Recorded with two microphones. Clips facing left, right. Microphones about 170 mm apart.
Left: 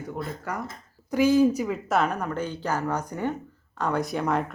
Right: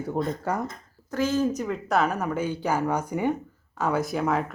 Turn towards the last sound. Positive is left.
turn(degrees=0)  # may be behind; listen again after turning